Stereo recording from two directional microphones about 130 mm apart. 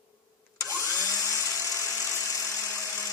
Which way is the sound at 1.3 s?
25° left (ahead or behind).